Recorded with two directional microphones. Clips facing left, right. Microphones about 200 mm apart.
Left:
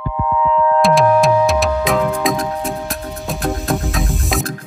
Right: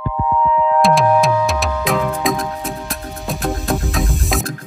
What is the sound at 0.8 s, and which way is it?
Music, centre (ahead or behind).